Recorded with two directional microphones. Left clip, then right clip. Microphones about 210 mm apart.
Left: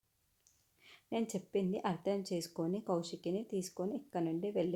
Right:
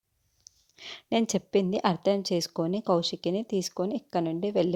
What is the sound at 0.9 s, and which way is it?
A woman's voice, 40° right (ahead or behind).